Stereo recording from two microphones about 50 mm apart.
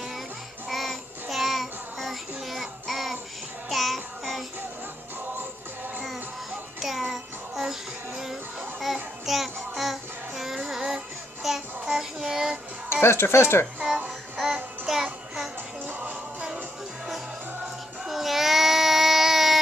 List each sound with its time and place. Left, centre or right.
0.7 s child singing: centre
6.8 s music: centre
9.2 s music: centre
11.4 s child singing: centre
12.9 s speech: left
14.3 s music: centre
18.0 s child singing: centre